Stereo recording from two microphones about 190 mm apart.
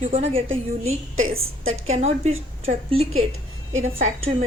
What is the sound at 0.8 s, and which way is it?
Speech, 90° right.